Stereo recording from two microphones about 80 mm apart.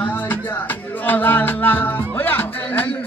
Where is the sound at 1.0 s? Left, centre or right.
Left.